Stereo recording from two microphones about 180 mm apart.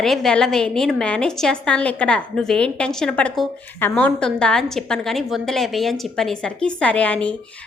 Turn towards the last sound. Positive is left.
turn(degrees=5)  # may be behind; listen again after turning